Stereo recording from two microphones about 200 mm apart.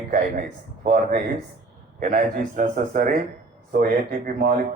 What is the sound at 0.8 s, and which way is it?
A man's voice, 45° right (ahead or behind).